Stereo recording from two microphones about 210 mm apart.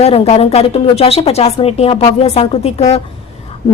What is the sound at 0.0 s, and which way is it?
Speech, 30° left (ahead or behind).